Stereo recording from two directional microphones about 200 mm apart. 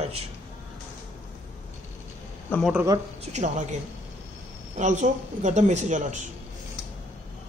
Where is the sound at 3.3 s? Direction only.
35° right (ahead or behind).